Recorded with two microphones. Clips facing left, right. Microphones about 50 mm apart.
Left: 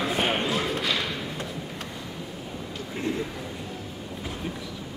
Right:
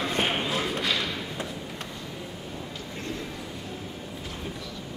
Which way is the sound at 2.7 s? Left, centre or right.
Centre.